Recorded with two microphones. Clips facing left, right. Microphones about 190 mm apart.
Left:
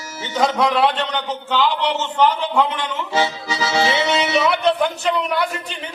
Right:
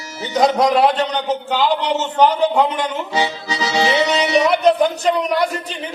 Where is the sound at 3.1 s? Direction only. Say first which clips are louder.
Even; 15° right (ahead or behind).